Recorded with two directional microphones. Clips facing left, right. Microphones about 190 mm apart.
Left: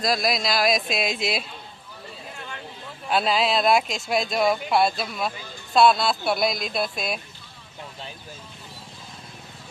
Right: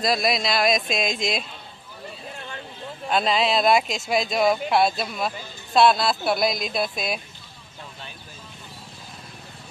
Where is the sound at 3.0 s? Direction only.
5° left (ahead or behind).